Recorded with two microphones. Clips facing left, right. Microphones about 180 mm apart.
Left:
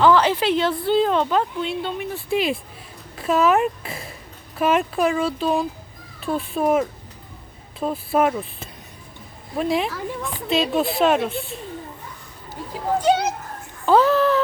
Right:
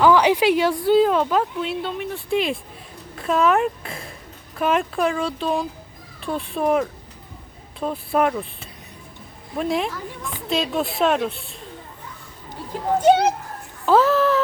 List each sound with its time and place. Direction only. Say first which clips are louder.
0.0 s a woman's voice: right 1 dB; 15° right (ahead or behind); by 8.4 s 5° left (ahead or behind)
9.6 s a woman's voice: left 1 dB; centre (ahead or behind)
13.0 s a child's voice: right 4 dB; 55° right (ahead or behind)
13.8 s a sound: even; centre (ahead or behind)